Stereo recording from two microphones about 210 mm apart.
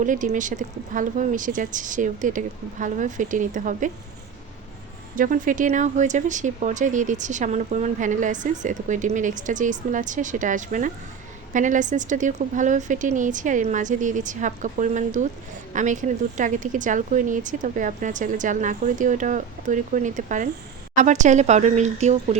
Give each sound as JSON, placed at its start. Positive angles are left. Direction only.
{"t": 0.0, "sound": "speech", "side_deg": -35}
{"t": 5.1, "sound": "speech", "side_deg": -40}